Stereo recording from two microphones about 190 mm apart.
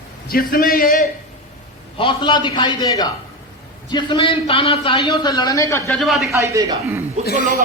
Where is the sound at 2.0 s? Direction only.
25° left (ahead or behind).